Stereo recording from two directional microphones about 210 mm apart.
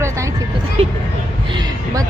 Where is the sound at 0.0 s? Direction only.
15° right (ahead or behind).